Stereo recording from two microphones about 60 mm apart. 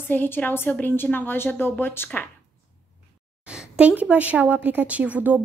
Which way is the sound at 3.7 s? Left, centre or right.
Right.